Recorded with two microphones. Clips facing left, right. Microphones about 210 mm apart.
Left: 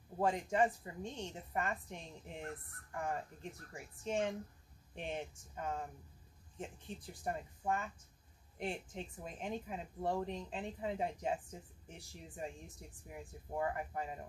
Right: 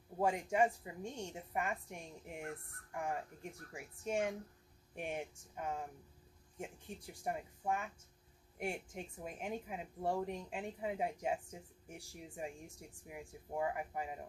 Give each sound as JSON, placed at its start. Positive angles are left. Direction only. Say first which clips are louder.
{"t": 0.2, "sound": "speech", "louder": "even", "side_deg": -10}